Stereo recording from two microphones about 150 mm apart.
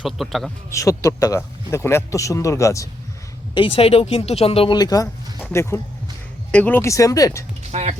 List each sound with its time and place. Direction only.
0.0 s a man's voice: centre (ahead or behind)
0.7 s speech: 20° left (ahead or behind)
3.5 s speech: 35° left (ahead or behind)
7.7 s speech: 45° right (ahead or behind)